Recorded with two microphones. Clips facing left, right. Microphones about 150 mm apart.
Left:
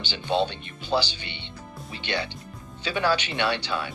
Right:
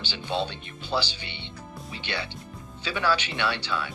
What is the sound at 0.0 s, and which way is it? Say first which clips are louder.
Speech: left 4 dB; 15° left (ahead or behind).